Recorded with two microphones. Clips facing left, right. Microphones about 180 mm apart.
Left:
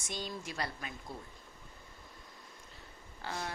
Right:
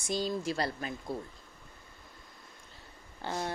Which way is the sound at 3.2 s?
30° right (ahead or behind).